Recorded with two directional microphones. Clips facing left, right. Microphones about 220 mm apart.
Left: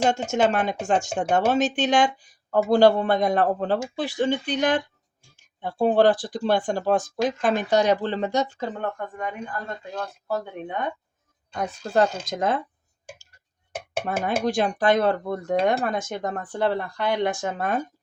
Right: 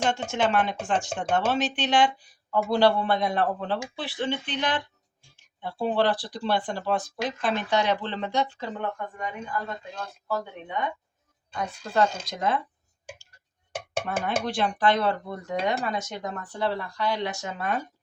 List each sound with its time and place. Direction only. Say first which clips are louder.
0.1 s speech: left 3 dB; 45° left (ahead or behind)
14.0 s speech: left 4 dB; 45° left (ahead or behind)